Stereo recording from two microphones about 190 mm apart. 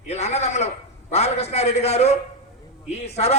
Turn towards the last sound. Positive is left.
turn(degrees=35)  # may be behind; listen again after turning